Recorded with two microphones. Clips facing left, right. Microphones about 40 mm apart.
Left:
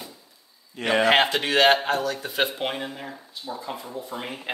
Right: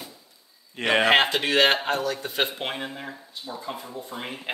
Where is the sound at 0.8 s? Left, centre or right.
Right.